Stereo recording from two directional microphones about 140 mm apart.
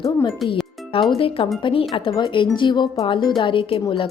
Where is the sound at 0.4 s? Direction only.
Centre (ahead or behind).